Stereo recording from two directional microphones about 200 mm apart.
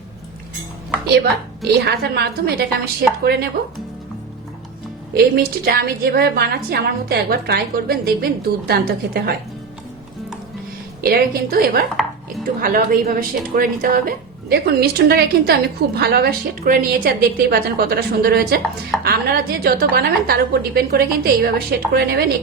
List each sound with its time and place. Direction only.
1.2 s a woman's voice: 50° right (ahead or behind)
5.1 s a woman's voice: 50° right (ahead or behind)
11.0 s a woman's voice: 50° right (ahead or behind)
12.0 s chopping: centre (ahead or behind)
12.5 s a woman's voice: 45° right (ahead or behind)